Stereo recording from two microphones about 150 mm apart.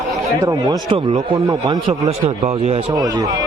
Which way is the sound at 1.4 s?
25° right (ahead or behind).